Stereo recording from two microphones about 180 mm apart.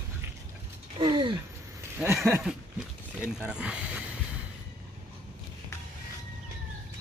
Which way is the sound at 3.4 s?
5° right (ahead or behind).